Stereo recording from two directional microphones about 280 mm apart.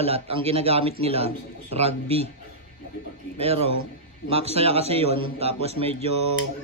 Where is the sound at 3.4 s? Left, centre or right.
Right.